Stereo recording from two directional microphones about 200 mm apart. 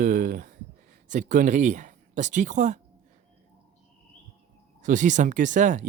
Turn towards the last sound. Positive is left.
turn(degrees=-40)  # may be behind; listen again after turning